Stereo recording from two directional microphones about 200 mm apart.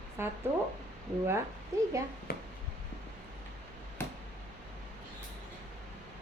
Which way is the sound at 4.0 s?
10° left (ahead or behind).